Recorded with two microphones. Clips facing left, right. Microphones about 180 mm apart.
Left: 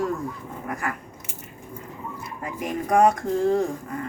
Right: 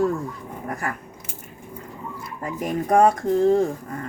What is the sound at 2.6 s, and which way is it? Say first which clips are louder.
Speech: right 2 dB; 35° right (ahead or behind).